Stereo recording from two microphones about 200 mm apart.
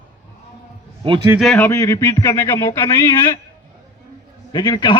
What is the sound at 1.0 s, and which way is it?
Speech, 25° right (ahead or behind).